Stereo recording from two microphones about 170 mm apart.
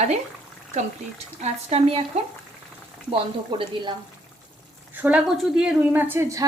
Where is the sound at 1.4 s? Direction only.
35° right (ahead or behind).